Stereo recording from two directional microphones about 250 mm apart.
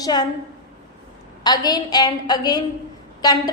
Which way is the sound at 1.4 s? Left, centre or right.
Centre.